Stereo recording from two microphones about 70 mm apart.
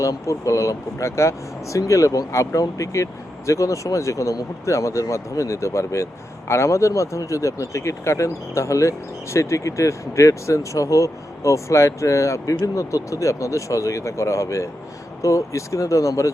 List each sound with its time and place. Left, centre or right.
0.0 s speech: left